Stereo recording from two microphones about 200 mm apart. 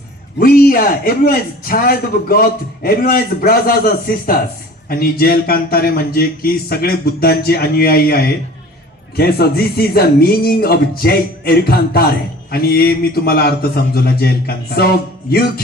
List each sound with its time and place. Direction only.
0.3 s a man's voice: 45° left (ahead or behind)